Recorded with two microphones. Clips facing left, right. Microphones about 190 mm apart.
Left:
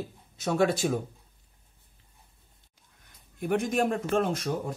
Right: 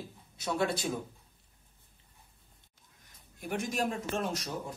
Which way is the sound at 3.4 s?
55° left (ahead or behind).